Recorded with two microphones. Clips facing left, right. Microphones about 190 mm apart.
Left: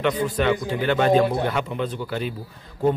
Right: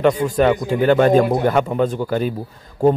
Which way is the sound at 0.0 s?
45° right (ahead or behind).